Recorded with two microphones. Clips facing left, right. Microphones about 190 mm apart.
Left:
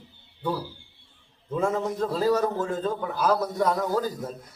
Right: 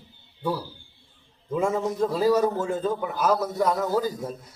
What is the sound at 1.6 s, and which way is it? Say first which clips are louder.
A man's voice: right 1 dB; 10° right (ahead or behind).